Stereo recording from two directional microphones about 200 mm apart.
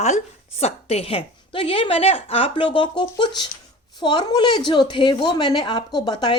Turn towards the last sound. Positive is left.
turn(degrees=20)  # may be behind; listen again after turning